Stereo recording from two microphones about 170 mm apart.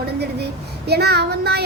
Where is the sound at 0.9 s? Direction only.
70° right (ahead or behind).